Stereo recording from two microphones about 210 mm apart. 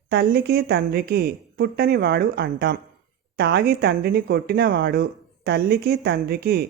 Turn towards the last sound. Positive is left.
turn(degrees=-50)  # may be behind; listen again after turning